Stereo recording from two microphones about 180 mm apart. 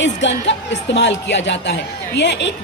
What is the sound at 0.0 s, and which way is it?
Speech, 90° left.